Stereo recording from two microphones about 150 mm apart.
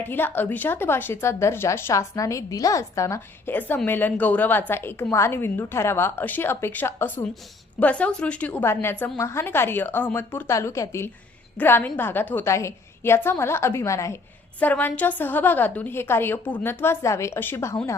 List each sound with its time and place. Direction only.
0.0 s a woman's voice: 15° left (ahead or behind)